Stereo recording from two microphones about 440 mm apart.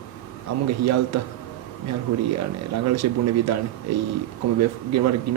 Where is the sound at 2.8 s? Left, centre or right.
Right.